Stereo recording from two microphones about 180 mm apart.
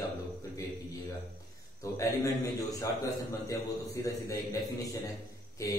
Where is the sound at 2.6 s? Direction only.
20° left (ahead or behind).